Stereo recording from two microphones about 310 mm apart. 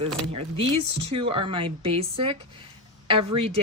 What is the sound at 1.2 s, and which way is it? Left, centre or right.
Speech, centre.